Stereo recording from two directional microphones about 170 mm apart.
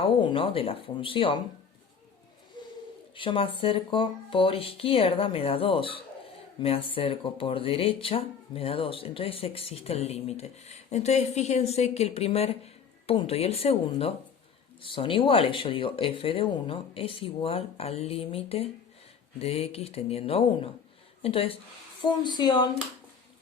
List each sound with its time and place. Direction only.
0.0 s speech: 30° left (ahead or behind)
2.6 s bird: 25° left (ahead or behind)
3.2 s speech: 30° left (ahead or behind)